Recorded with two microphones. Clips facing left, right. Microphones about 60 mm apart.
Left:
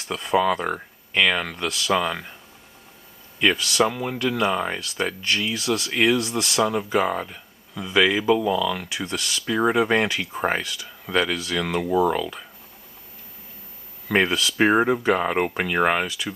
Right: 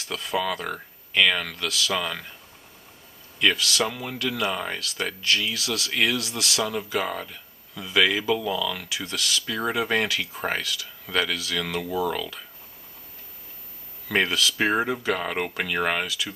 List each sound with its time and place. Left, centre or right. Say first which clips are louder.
0.0 s speech: left 6 dB; left
1.7 s speech: left 4 dB; left
2.0 s speech: left 5 dB; centre
3.3 s speech: left 3 dB; centre
8.8 s speech: left 2 dB; left
14.0 s speech: left 2 dB; centre